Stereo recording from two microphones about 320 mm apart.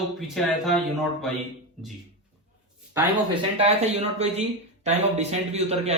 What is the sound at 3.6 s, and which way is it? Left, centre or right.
Speech, centre.